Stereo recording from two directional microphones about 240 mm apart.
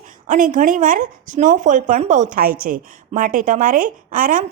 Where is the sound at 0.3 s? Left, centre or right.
Right.